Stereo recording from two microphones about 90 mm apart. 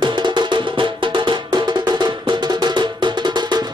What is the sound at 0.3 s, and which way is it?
Music, 60° right (ahead or behind).